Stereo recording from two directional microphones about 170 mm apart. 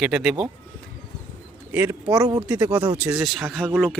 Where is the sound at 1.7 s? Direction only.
10° right (ahead or behind).